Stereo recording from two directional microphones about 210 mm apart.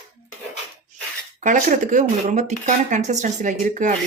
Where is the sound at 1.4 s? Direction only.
35° right (ahead or behind).